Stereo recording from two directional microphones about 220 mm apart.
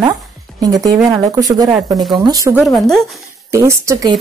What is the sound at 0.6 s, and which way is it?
Speech, 15° right (ahead or behind).